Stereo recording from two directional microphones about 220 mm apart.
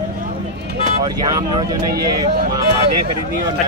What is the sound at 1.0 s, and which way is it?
Speech, 20° right (ahead or behind).